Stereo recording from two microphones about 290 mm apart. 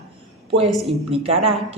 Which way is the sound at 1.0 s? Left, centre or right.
Right.